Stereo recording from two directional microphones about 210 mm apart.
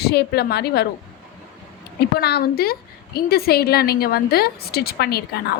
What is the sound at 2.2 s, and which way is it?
A woman's voice, 50° left (ahead or behind).